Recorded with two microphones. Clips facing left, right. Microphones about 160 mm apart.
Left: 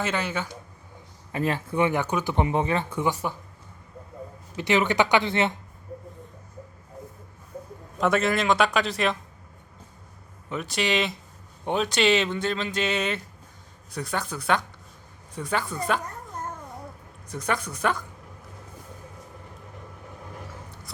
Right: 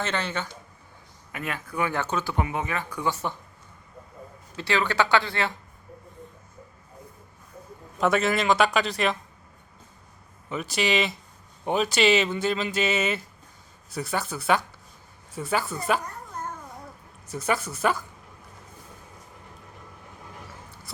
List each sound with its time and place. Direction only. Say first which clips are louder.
0.0 s speech: left 1 dB; 10° left (ahead or behind)
1.3 s speech: left 7 dB; 30° left (ahead or behind); by 2.3 s 15° left (ahead or behind)
2.3 s speech: left 4 dB; 30° left (ahead or behind)
4.5 s speech: left 3 dB; 20° left (ahead or behind)
7.9 s speech: even; centre (ahead or behind)
10.5 s speech: right 1 dB; centre (ahead or behind)
17.2 s speech: right 1 dB; 5° right (ahead or behind)